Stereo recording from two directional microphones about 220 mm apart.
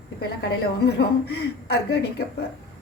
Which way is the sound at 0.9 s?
50° left (ahead or behind).